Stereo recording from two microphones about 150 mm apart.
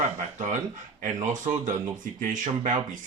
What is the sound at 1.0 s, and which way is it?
Speech, 55° right (ahead or behind).